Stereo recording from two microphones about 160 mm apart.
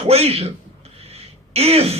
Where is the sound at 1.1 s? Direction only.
40° right (ahead or behind).